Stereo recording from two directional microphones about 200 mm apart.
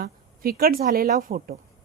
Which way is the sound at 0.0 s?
50° right (ahead or behind).